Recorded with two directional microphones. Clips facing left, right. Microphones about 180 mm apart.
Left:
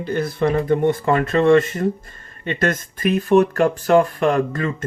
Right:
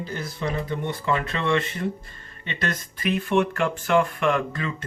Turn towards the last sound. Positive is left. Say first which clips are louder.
# left 5 dB
turn(degrees=40)  # may be behind; listen again after turning